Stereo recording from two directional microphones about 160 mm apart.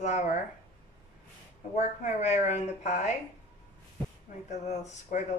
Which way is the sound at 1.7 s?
45° left (ahead or behind).